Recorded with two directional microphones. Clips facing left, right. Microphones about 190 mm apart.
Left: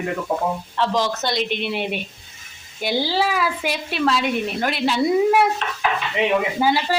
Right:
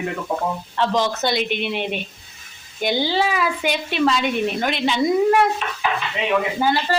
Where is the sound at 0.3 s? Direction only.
5° left (ahead or behind).